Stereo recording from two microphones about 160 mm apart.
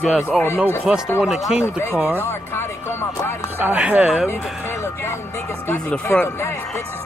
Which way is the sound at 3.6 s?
10° right (ahead or behind).